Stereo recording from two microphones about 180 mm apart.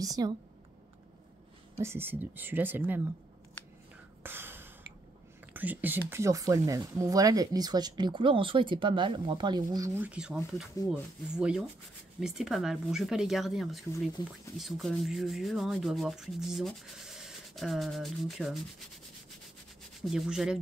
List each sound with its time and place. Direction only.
0.0 s speech: 20° right (ahead or behind)
1.8 s speech: 15° right (ahead or behind)
4.2 s gasp: 10° right (ahead or behind)
5.5 s speech: 10° right (ahead or behind)
10.9 s rub: 5° right (ahead or behind)
14.2 s speech: 20° left (ahead or behind)
14.6 s rub: centre (ahead or behind)
20.0 s rub: centre (ahead or behind)